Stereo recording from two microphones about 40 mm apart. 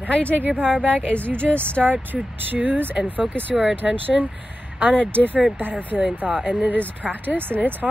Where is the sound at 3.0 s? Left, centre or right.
Right.